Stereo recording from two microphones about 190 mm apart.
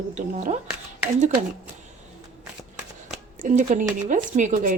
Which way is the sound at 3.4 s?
40° right (ahead or behind).